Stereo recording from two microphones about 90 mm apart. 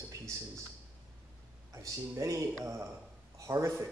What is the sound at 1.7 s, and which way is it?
A man's voice, 35° right (ahead or behind).